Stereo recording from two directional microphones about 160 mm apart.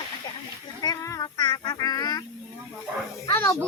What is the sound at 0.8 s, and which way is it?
Child singing, 20° left (ahead or behind).